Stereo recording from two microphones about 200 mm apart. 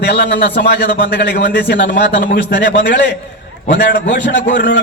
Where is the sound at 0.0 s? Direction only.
55° left (ahead or behind).